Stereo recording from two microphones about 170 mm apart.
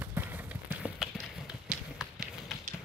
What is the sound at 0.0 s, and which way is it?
Clip-clop, 10° right (ahead or behind).